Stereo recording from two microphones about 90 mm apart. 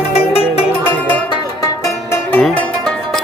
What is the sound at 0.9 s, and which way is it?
Music, 20° left (ahead or behind).